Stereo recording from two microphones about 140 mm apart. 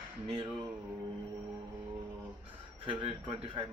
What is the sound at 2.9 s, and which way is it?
Speech, 40° right (ahead or behind).